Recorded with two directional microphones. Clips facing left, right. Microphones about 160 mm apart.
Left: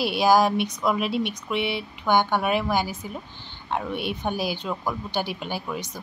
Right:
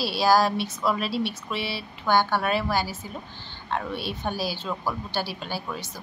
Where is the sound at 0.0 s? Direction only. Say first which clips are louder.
Left 2 dB; 20° left (ahead or behind).